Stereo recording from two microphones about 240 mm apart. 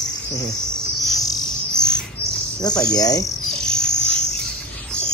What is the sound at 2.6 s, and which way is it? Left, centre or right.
Speech, centre.